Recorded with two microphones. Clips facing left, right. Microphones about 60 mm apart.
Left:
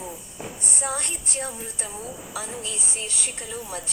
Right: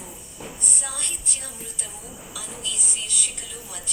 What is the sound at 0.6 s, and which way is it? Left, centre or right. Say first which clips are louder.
A woman's voice: left 7 dB; left.